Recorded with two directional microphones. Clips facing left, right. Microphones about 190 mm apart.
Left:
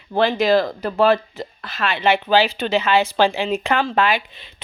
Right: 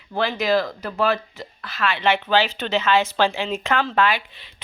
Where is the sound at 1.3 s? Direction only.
50° left (ahead or behind).